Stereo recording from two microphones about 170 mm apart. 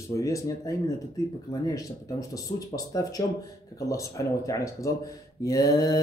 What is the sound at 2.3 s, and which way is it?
Mantra, 20° left (ahead or behind).